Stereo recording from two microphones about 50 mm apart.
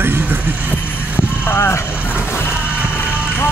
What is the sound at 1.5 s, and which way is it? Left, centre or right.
Speech, left.